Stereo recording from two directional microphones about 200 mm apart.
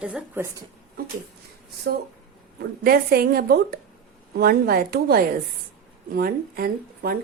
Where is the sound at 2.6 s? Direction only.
50° right (ahead or behind).